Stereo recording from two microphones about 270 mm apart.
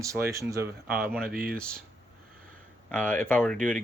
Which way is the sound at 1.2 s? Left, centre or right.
Right.